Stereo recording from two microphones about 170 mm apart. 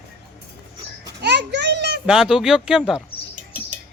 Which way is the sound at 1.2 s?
85° right.